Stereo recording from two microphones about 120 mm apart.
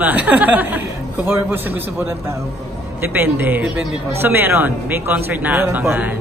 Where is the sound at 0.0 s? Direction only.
15° right (ahead or behind).